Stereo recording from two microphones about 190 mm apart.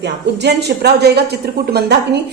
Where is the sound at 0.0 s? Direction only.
60° right (ahead or behind).